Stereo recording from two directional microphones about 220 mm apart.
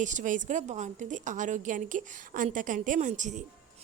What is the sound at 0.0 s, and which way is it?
A woman's voice, 35° right (ahead or behind).